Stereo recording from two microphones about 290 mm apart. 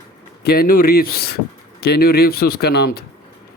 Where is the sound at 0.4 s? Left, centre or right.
Left.